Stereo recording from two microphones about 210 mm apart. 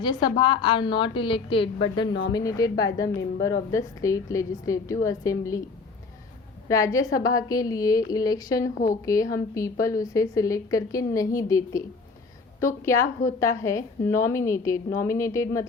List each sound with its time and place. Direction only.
0.0 s a woman's voice: 20° left (ahead or behind)
6.7 s a woman's voice: 15° left (ahead or behind)